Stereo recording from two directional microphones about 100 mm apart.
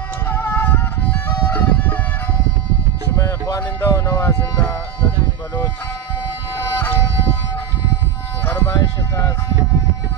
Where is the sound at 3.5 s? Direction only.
25° left (ahead or behind).